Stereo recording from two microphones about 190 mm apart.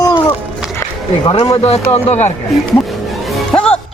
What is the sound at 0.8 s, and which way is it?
Speech, 25° left (ahead or behind).